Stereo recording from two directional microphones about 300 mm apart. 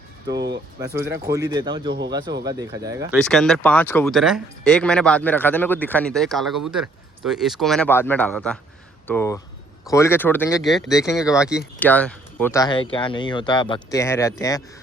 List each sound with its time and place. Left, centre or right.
0.3 s speech: right
0.9 s speech: centre
3.2 s speech: centre
10.9 s speech: centre